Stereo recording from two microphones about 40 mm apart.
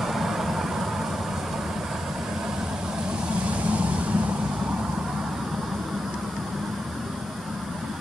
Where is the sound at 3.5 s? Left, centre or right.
Right.